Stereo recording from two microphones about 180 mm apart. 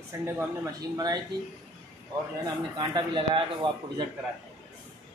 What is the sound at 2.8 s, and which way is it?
A man's voice, 25° right (ahead or behind).